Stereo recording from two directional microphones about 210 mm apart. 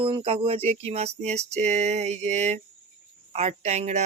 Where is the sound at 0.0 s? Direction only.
25° right (ahead or behind).